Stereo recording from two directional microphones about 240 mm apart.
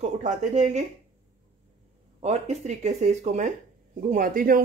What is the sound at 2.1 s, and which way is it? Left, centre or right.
Speech, right.